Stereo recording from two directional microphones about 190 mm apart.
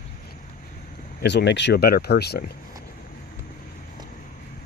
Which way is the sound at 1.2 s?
65° left (ahead or behind).